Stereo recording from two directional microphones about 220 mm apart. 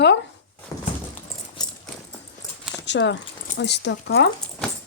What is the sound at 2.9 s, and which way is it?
Speech, 55° left (ahead or behind).